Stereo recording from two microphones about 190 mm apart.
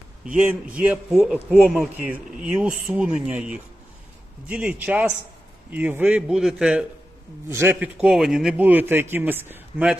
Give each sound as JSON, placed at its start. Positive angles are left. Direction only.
{"t": 0.3, "sound": "a man's voice", "side_deg": -10}